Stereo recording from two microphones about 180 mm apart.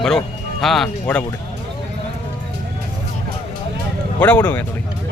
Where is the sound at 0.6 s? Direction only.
Centre (ahead or behind).